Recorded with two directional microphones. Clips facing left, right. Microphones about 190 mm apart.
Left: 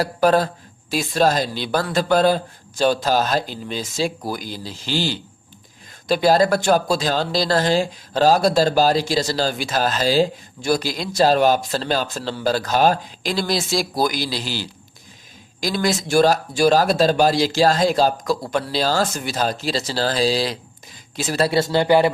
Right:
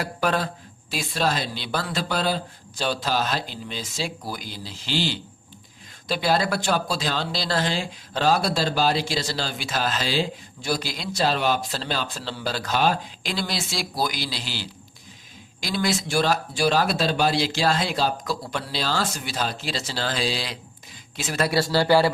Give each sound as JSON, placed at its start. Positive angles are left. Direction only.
{"t": 0.0, "sound": "speech", "side_deg": 40}